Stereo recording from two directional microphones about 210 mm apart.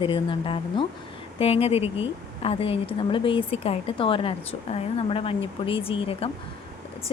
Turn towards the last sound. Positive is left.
turn(degrees=25)  # may be behind; listen again after turning